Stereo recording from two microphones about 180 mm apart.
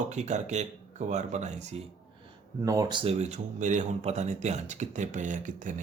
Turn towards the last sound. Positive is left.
turn(degrees=-45)  # may be behind; listen again after turning